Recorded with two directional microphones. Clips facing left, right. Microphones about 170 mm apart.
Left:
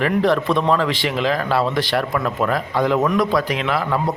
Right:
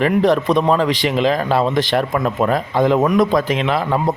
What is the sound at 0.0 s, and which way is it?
A man's voice, 20° right (ahead or behind).